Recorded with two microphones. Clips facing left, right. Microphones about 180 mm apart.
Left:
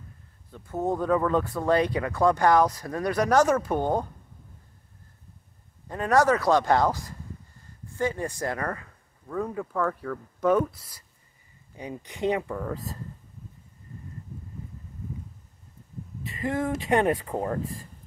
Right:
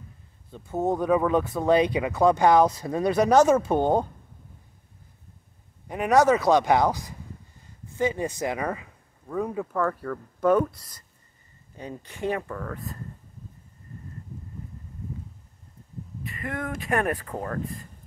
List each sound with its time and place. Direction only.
0.5 s speech: 20° right (ahead or behind)
5.9 s a man's voice: 15° right (ahead or behind)
9.7 s speech: centre (ahead or behind)
16.3 s speech: 25° left (ahead or behind)